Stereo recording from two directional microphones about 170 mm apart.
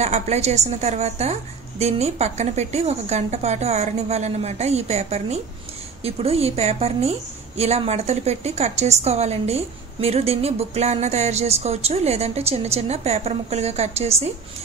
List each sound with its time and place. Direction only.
0.0 s a woman's voice: 40° right (ahead or behind)